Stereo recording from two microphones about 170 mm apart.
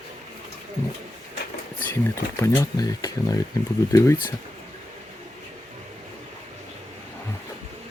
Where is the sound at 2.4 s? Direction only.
20° left (ahead or behind).